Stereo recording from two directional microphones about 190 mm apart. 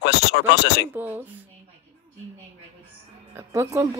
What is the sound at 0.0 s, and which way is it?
Speech, 60° left (ahead or behind).